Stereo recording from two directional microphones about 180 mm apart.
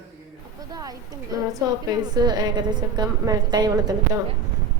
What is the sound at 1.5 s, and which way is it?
A woman's voice, 20° right (ahead or behind).